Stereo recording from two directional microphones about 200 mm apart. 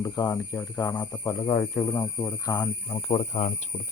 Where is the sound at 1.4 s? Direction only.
25° left (ahead or behind).